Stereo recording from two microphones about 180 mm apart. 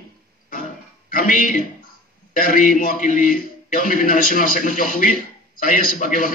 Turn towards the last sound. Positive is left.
turn(degrees=50)  # may be behind; listen again after turning